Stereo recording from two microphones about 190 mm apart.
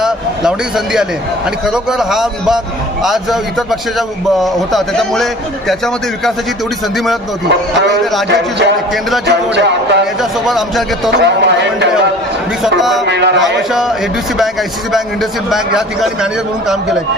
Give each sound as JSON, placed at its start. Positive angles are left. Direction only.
{"t": 1.6, "sound": "a man's voice", "side_deg": 0}
{"t": 8.3, "sound": "speech", "side_deg": -65}
{"t": 8.9, "sound": "a man's voice", "side_deg": 0}
{"t": 9.2, "sound": "speech", "side_deg": -65}
{"t": 10.2, "sound": "a man's voice", "side_deg": 0}
{"t": 11.1, "sound": "speech", "side_deg": -65}
{"t": 13.1, "sound": "speech", "side_deg": -65}
{"t": 13.4, "sound": "a man's voice", "side_deg": 0}
{"t": 14.9, "sound": "a man's voice", "side_deg": 0}